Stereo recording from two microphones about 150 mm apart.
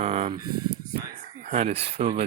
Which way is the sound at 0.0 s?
45° right (ahead or behind).